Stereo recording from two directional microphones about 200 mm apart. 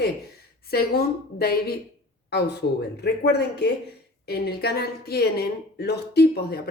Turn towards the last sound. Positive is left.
turn(degrees=50)  # may be behind; listen again after turning